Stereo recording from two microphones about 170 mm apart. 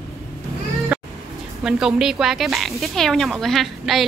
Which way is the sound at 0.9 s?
5° right (ahead or behind).